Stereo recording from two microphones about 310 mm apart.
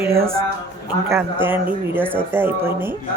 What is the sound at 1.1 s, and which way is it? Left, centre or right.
Speech, centre.